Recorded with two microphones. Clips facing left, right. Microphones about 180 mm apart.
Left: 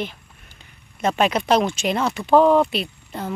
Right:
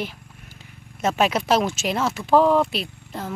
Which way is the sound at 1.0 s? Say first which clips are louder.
Left 1 dB; 5° right (ahead or behind).